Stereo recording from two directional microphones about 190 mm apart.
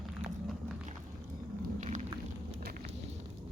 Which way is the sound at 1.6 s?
40° right (ahead or behind).